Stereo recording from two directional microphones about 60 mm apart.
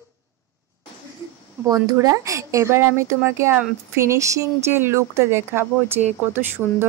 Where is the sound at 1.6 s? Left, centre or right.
Right.